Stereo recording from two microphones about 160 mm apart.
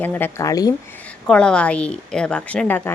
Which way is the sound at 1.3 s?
5° left (ahead or behind).